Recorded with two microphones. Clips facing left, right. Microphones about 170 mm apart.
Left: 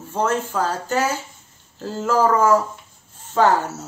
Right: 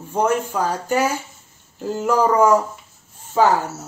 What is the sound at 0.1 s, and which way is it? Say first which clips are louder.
A woman's voice: right 2 dB; 15° right (ahead or behind).